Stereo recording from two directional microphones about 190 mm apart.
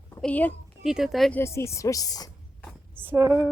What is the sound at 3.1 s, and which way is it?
Speech, 20° right (ahead or behind).